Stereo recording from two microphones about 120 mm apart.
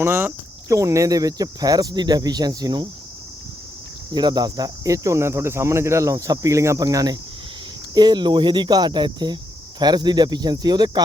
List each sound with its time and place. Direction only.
0.0 s speech: 20° right (ahead or behind)
4.1 s cricket: 35° right (ahead or behind)
7.9 s speech: 35° right (ahead or behind)